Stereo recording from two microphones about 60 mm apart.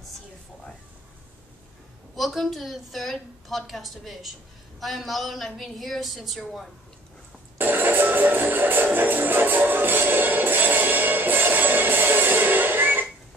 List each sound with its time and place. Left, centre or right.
2.1 s a woman's voice: centre
7.5 s music: right